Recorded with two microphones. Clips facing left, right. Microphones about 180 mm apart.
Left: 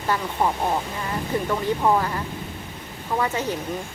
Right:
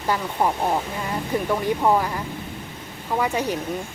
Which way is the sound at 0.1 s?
10° right (ahead or behind).